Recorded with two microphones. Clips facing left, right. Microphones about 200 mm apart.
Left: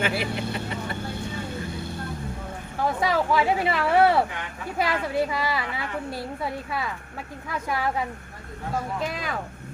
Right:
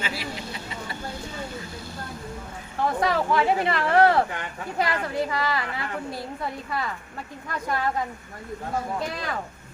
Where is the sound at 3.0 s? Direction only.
Centre (ahead or behind).